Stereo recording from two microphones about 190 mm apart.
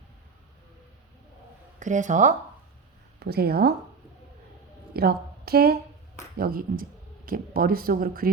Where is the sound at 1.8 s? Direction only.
40° right (ahead or behind).